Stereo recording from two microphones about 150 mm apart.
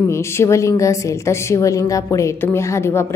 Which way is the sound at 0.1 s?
15° left (ahead or behind).